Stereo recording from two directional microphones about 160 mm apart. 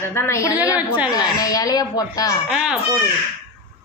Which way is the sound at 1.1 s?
20° left (ahead or behind).